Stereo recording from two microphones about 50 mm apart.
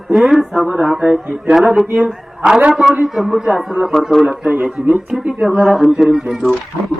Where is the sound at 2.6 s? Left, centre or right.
Centre.